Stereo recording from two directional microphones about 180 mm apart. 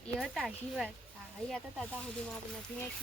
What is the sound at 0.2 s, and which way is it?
Speech, centre (ahead or behind).